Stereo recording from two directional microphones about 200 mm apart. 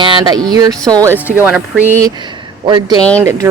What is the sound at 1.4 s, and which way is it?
Speech, 5° right (ahead or behind).